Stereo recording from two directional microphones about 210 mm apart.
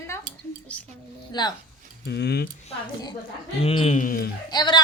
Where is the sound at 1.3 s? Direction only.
20° left (ahead or behind).